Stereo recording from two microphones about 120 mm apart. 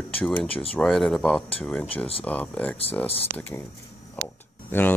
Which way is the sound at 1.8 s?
50° left (ahead or behind).